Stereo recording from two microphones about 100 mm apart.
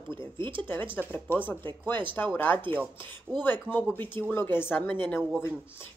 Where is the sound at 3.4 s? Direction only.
20° left (ahead or behind).